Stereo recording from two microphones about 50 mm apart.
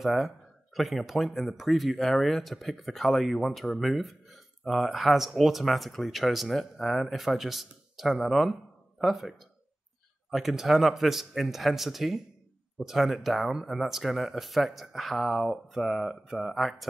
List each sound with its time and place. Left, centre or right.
0.0 s speech: centre
10.3 s speech: centre